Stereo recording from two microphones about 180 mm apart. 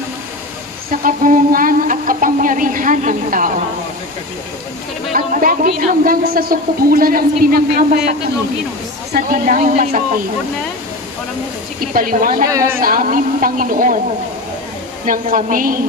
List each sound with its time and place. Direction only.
1.0 s a sound: 50° right (ahead or behind)
5.1 s speech: 50° right (ahead or behind)
11.9 s speech: 50° right (ahead or behind)
12.4 s speech: 20° right (ahead or behind)
12.8 s speech: 50° right (ahead or behind)
15.0 s speech: 50° right (ahead or behind)